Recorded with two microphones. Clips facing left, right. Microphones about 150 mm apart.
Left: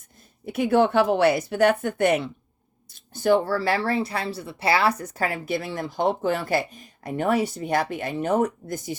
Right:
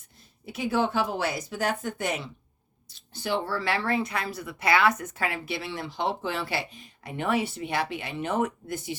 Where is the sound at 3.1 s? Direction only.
45° left (ahead or behind).